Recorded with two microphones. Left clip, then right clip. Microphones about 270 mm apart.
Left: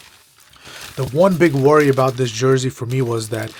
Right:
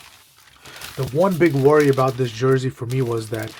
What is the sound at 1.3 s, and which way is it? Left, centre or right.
Speech, left.